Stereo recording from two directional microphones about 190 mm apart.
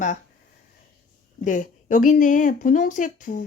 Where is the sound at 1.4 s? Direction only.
40° left (ahead or behind).